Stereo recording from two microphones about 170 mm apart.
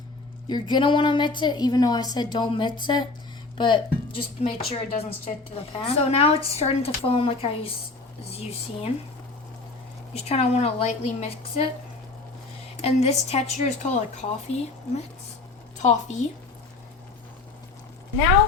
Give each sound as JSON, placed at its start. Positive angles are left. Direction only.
{"t": 0.4, "sound": "a woman's voice", "side_deg": 25}
{"t": 10.2, "sound": "a woman's voice", "side_deg": 35}
{"t": 12.8, "sound": "a woman's voice", "side_deg": 40}